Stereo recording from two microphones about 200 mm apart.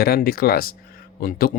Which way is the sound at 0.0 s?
50° left (ahead or behind).